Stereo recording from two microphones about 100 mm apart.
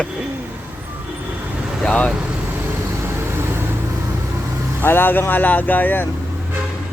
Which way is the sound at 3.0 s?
25° right (ahead or behind).